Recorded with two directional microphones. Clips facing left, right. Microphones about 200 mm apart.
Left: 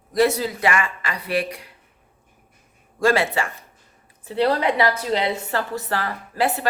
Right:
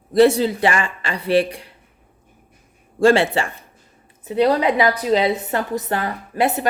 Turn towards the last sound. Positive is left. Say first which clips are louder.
# right 3 dB
turn(degrees=-20)  # may be behind; listen again after turning